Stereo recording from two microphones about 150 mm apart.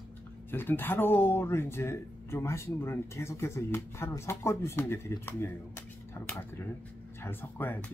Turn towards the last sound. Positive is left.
turn(degrees=15)  # may be behind; listen again after turning